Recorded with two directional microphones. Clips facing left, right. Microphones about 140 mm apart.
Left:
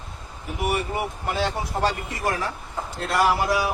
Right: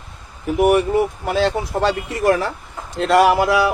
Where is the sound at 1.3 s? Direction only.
90° right; by 2.5 s 75° right (ahead or behind).